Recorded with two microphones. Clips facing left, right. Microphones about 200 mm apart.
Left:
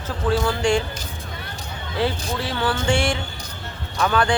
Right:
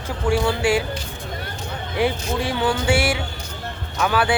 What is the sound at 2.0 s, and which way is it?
Speech, 15° right (ahead or behind).